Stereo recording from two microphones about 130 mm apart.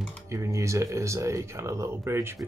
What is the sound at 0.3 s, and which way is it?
Speech, 25° right (ahead or behind).